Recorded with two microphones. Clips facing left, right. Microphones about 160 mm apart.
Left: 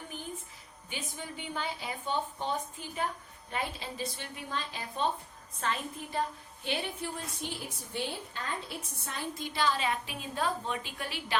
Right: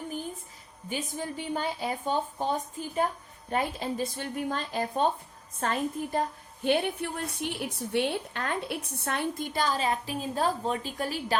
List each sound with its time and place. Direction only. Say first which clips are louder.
0.9 s a woman's voice: right 7 dB; 40° right (ahead or behind)